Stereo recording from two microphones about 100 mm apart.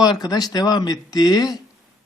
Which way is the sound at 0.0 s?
40° left (ahead or behind).